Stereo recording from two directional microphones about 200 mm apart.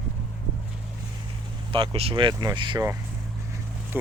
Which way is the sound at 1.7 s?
25° right (ahead or behind).